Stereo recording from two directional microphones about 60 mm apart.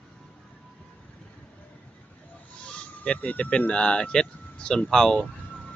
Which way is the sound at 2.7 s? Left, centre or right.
Centre.